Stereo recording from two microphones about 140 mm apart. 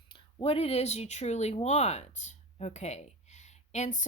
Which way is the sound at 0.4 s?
45° left (ahead or behind).